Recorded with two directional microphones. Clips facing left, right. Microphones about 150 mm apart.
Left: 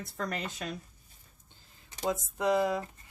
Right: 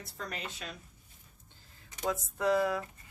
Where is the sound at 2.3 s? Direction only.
20° left (ahead or behind).